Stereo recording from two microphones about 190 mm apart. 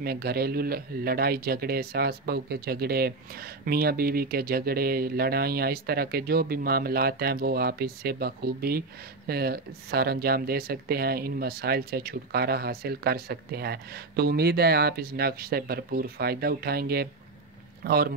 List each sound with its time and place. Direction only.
0.0 s speech: 55° right (ahead or behind)